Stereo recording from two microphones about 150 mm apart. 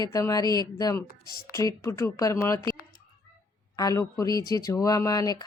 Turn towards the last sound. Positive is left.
turn(degrees=25)  # may be behind; listen again after turning